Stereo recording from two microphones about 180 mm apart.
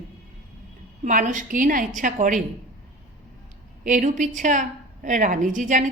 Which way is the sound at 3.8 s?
45° right (ahead or behind).